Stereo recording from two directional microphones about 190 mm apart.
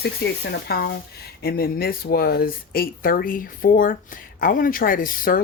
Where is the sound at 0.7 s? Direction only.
55° left (ahead or behind).